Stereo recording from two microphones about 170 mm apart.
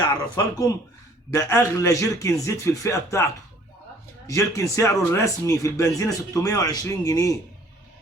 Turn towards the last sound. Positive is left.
turn(degrees=20)  # may be behind; listen again after turning